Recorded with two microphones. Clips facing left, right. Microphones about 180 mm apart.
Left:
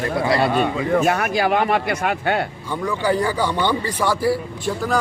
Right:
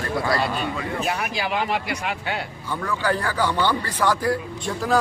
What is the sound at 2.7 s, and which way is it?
A man's voice, 15° left (ahead or behind).